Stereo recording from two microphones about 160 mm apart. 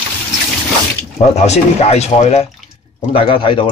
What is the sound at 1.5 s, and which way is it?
Speech, 40° left (ahead or behind).